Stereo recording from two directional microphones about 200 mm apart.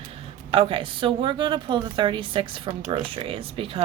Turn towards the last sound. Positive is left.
turn(degrees=-25)  # may be behind; listen again after turning